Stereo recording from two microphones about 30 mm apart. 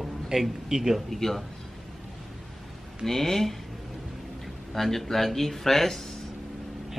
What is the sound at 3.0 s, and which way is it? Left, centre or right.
Speech, centre.